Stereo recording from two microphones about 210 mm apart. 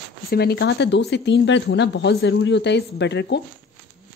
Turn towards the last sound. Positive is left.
turn(degrees=55)  # may be behind; listen again after turning